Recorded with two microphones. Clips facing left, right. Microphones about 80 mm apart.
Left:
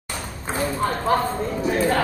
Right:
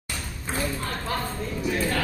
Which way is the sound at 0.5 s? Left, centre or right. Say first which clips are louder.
Left 6 dB; left.